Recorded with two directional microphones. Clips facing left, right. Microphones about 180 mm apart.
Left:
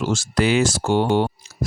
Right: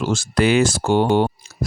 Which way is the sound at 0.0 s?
55° right (ahead or behind).